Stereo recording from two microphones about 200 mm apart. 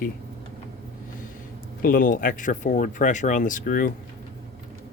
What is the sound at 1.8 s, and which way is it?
Speech, 45° left (ahead or behind).